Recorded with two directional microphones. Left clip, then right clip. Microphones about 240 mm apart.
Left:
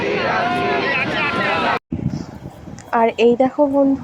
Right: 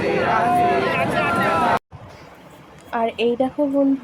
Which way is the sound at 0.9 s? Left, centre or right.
Right.